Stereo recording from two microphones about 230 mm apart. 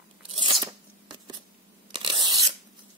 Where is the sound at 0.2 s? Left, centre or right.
Right.